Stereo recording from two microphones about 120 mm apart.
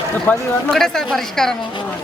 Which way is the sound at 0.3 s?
15° left (ahead or behind).